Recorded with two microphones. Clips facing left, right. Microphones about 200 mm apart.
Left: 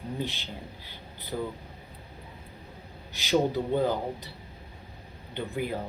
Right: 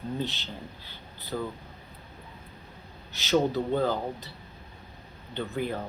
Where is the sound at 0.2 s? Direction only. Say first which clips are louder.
Right 1 dB; 15° left (ahead or behind).